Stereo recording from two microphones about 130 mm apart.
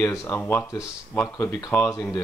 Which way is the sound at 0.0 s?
25° left (ahead or behind).